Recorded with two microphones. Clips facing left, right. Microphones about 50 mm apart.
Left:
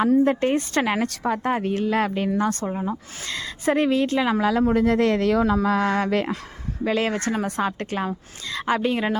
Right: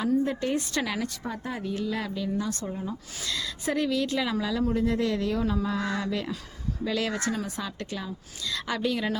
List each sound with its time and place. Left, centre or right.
0.0 s speech: left
1.0 s a woman's voice: left
1.5 s speech: left
2.6 s a woman's voice: left
4.4 s speech: left
4.7 s speech: left
6.8 s a woman's voice: left
8.5 s a woman's voice: left